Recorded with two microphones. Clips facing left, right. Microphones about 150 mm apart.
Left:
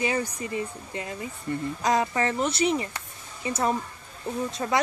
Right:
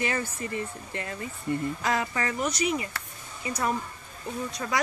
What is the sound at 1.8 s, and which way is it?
Speech, 20° left (ahead or behind).